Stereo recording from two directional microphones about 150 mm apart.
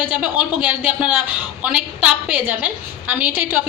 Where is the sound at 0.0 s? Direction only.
10° right (ahead or behind).